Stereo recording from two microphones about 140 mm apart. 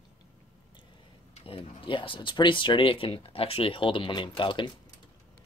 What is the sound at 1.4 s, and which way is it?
Speech, 40° left (ahead or behind).